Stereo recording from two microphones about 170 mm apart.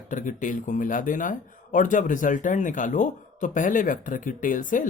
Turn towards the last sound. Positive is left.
turn(degrees=50)  # may be behind; listen again after turning